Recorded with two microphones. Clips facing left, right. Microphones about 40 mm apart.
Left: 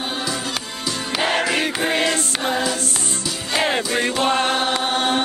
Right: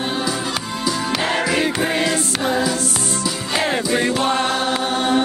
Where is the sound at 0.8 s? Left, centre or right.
Centre.